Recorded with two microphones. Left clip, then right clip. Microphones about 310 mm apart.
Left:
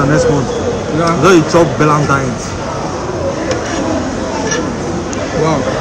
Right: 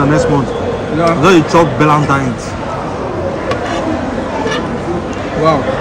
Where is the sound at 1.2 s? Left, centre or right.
Right.